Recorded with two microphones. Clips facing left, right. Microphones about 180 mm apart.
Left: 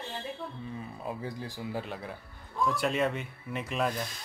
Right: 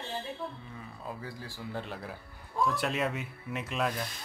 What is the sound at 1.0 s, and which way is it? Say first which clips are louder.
Speech: left 4 dB; 20° left (ahead or behind).